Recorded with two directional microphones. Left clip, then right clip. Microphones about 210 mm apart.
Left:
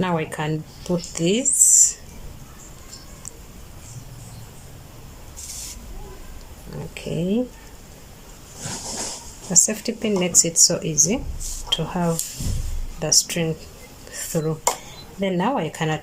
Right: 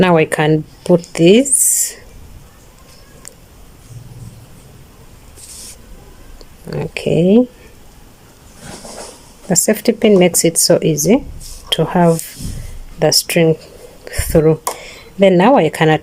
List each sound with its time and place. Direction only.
0.0 s speech: 45° right (ahead or behind)
6.7 s speech: 45° right (ahead or behind)
9.6 s speech: 40° right (ahead or behind)